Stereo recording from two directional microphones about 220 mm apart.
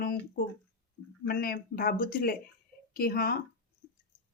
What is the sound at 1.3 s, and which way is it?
Speech, 45° left (ahead or behind).